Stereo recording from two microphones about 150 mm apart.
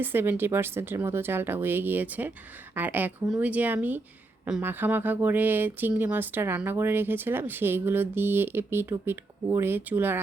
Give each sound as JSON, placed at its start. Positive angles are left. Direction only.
{"t": 0.0, "sound": "speech", "side_deg": -15}